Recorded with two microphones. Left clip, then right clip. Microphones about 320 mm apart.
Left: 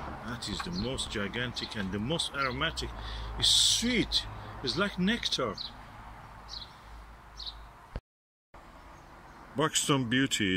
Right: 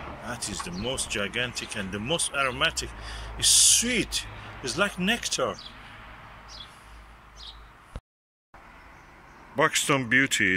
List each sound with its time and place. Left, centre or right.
0.3 s speech: centre
9.6 s speech: centre